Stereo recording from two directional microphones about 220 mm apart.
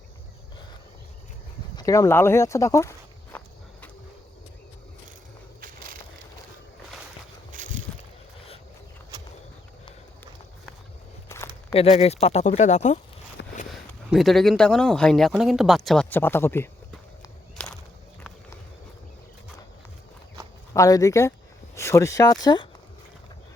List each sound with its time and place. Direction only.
1.7 s speech: 15° left (ahead or behind)
5.5 s crushing: 40° right (ahead or behind)
7.5 s a sound: 35° right (ahead or behind)
11.3 s walk: 15° left (ahead or behind)
11.7 s speech: 30° left (ahead or behind)
13.4 s a sound: 55° left (ahead or behind)
14.1 s speech: centre (ahead or behind)
20.7 s speech: 15° left (ahead or behind)